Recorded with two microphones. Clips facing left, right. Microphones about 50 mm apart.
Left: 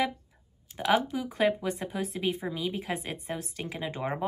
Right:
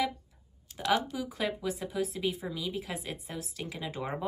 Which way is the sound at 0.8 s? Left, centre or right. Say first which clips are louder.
Left 3 dB; centre.